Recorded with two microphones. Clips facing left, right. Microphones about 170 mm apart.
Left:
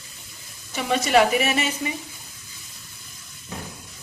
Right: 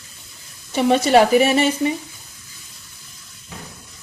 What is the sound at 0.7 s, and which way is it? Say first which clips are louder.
Speech: right 5 dB; 30° right (ahead or behind).